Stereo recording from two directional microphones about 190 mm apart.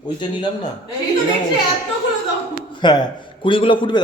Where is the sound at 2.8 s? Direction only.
20° left (ahead or behind).